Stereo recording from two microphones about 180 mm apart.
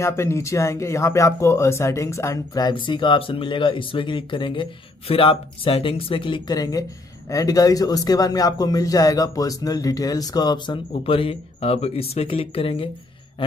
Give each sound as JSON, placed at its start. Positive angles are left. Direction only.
{"t": 0.0, "sound": "speech", "side_deg": 15}